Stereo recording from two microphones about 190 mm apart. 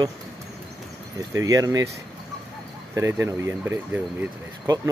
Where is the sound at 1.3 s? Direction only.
20° right (ahead or behind).